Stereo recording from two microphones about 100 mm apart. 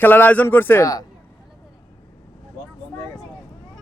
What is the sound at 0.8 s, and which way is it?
Speech, 40° left (ahead or behind).